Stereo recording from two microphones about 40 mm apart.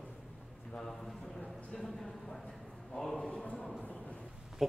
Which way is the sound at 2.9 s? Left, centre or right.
Left.